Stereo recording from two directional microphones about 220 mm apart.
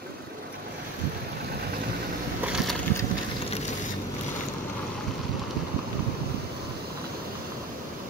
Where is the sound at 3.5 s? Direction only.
30° left (ahead or behind).